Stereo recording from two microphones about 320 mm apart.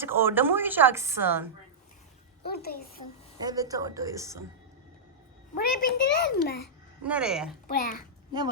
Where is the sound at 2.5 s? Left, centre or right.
Left.